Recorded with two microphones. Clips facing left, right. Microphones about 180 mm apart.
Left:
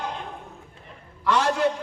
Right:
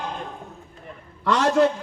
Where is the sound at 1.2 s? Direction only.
65° right (ahead or behind).